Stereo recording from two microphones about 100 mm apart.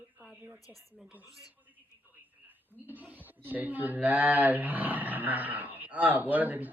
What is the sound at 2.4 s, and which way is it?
Speech, 15° right (ahead or behind).